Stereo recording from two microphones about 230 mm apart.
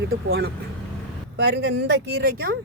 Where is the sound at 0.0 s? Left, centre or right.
Right.